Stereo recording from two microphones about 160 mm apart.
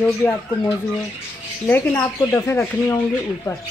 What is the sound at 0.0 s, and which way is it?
Speech, 10° left (ahead or behind).